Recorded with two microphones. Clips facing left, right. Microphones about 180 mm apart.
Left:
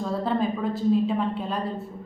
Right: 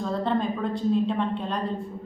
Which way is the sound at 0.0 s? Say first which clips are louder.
Even; 5° left (ahead or behind).